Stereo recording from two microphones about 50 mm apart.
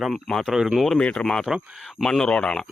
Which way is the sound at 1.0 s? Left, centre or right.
Left.